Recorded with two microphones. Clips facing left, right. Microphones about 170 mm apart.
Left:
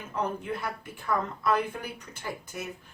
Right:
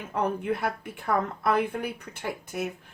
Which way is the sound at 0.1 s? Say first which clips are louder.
Right 4 dB; 60° right (ahead or behind).